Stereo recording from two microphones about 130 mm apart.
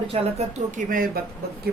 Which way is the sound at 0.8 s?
75° right (ahead or behind).